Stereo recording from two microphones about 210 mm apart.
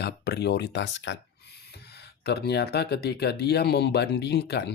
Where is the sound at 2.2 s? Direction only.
50° left (ahead or behind).